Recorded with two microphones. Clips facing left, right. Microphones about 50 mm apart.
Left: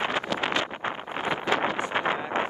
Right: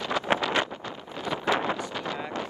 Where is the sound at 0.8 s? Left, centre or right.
Left.